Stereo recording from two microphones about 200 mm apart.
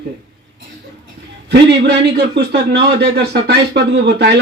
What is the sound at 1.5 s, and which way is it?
A man's voice, 55° right (ahead or behind).